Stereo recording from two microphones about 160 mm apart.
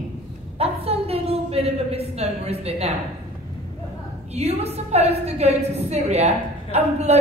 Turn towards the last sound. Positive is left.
turn(degrees=-45)  # may be behind; listen again after turning